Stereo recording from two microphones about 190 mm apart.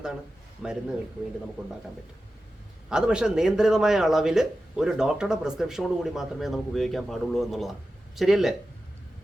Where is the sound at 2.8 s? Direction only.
5° right (ahead or behind).